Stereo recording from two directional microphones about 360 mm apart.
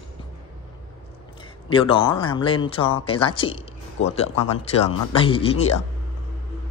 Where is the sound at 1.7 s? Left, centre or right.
Centre.